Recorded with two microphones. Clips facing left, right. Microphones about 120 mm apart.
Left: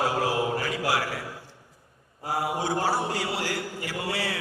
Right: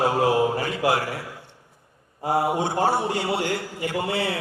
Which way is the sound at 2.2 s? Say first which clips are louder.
Right 5 dB; 25° right (ahead or behind).